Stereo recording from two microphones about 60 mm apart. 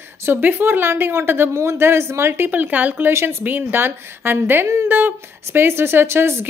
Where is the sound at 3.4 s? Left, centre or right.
Right.